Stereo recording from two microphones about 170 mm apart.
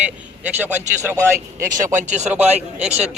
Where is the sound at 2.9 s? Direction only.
40° right (ahead or behind).